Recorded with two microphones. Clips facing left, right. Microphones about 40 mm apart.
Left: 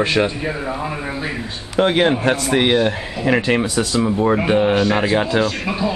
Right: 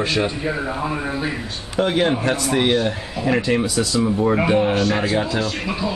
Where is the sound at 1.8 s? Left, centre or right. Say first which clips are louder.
Left 3 dB; left.